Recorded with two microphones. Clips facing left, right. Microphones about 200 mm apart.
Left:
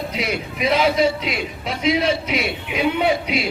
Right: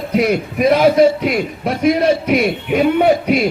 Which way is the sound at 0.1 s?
50° right (ahead or behind).